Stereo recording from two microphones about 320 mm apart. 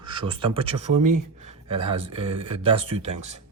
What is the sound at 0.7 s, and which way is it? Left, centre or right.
Speech, right.